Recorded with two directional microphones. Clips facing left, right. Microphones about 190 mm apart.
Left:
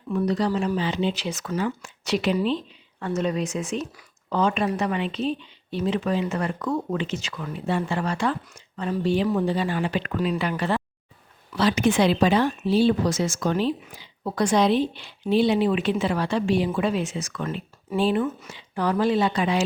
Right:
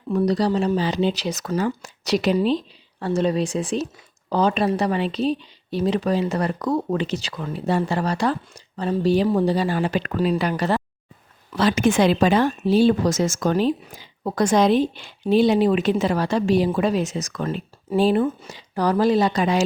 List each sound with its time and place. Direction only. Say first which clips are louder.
0.1 s speech: right 3 dB; 35° right (ahead or behind)
11.5 s speech: right 2 dB; 50° right (ahead or behind)